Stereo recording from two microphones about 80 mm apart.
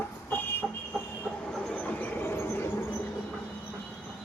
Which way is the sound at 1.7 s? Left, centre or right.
Left.